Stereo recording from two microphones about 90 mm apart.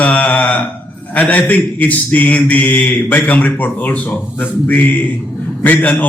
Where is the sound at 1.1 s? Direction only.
20° left (ahead or behind).